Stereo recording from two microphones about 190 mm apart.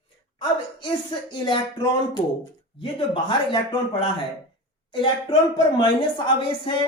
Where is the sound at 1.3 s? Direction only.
25° left (ahead or behind).